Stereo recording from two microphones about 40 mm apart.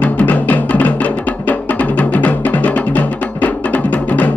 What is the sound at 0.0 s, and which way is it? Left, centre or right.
Music, left.